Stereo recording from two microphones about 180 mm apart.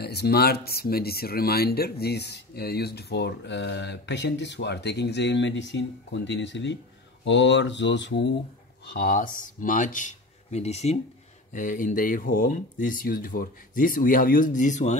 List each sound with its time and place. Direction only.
0.0 s speech: 65° left (ahead or behind)
8.9 s speech: 55° left (ahead or behind)